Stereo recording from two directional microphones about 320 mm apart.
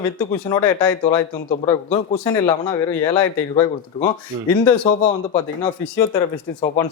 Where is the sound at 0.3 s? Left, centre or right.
Centre.